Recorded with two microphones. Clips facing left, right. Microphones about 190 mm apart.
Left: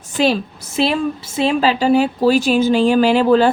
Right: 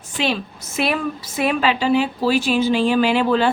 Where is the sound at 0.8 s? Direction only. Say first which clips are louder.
Left 4 dB; 30° left (ahead or behind).